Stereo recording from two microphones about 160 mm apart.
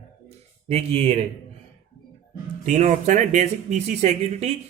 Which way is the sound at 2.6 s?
50° right (ahead or behind).